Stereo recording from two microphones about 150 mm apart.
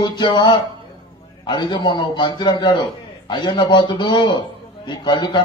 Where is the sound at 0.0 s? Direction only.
30° left (ahead or behind).